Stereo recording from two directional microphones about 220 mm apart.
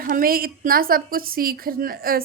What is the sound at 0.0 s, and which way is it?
A woman's voice, 40° right (ahead or behind).